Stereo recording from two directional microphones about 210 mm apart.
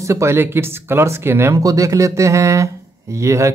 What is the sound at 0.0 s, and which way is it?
Speech, 15° right (ahead or behind).